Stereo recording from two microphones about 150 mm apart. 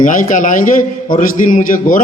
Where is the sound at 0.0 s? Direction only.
60° left (ahead or behind).